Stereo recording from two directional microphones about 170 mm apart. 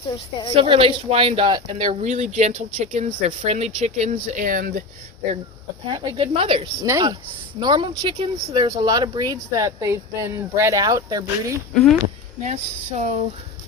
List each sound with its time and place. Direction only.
0.5 s speech: 30° right (ahead or behind)
2.0 s speech: 45° right (ahead or behind)
5.9 s speech: 30° right (ahead or behind)
6.8 s speech: 20° right (ahead or behind)
11.7 s speech: centre (ahead or behind)
12.4 s speech: 45° right (ahead or behind)